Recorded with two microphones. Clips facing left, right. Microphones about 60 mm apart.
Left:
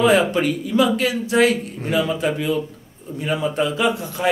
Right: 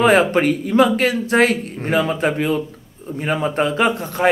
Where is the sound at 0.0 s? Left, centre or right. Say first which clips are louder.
Right 2 dB; right.